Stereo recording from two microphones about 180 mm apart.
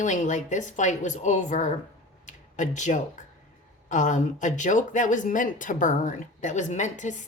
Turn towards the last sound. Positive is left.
turn(degrees=40)  # may be behind; listen again after turning